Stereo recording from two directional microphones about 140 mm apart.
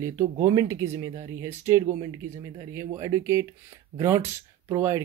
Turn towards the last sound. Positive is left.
turn(degrees=-20)  # may be behind; listen again after turning